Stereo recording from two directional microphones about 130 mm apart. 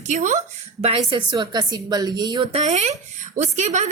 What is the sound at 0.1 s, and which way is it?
A woman's voice, 70° right (ahead or behind).